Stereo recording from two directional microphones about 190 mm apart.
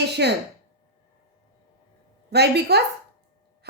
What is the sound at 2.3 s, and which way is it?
Speech, 60° right (ahead or behind).